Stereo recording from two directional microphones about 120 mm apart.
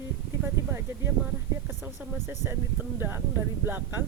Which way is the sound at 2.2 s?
20° right (ahead or behind).